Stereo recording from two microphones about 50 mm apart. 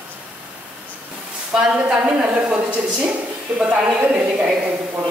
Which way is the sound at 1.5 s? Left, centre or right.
Centre.